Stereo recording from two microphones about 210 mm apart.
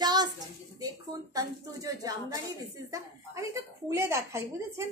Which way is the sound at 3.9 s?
15° right (ahead or behind).